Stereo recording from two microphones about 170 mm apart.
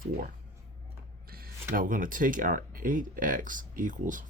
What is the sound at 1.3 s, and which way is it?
Mechanisms, 60° right (ahead or behind).